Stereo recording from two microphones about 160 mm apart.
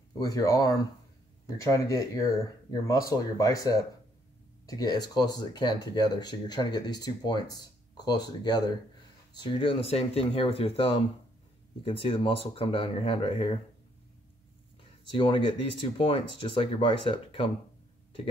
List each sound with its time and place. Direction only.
0.2 s speech: 20° left (ahead or behind)
15.1 s speech: 30° left (ahead or behind)